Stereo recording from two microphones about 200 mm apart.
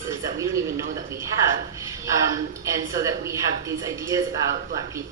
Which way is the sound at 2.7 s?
15° right (ahead or behind).